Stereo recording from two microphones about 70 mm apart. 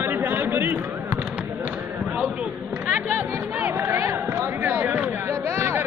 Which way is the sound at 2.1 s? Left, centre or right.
Right.